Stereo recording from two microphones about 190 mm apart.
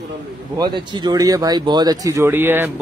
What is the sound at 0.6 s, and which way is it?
Speech, 25° right (ahead or behind).